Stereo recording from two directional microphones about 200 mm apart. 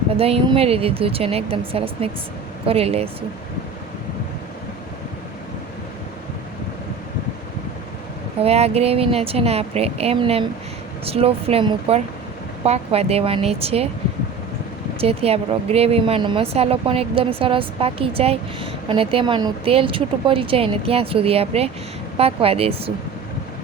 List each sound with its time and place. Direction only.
0.2 s speech: 30° right (ahead or behind)
8.4 s speech: 30° right (ahead or behind)
15.0 s speech: 30° right (ahead or behind)